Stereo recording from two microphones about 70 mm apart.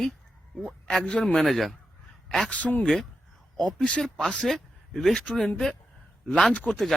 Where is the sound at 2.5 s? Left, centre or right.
Left.